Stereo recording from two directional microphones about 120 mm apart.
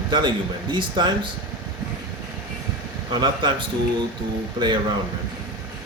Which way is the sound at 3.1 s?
40° right (ahead or behind).